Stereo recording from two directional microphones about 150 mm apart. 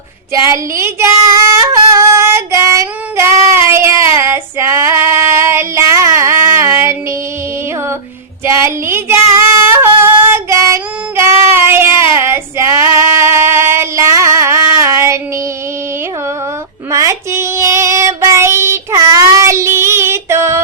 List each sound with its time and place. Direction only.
0.5 s female singing: 20° right (ahead or behind)
8.4 s female singing: 15° right (ahead or behind)
11.2 s a sound: 15° right (ahead or behind)
12.2 s child singing: 15° right (ahead or behind)
16.9 s child singing: 20° right (ahead or behind)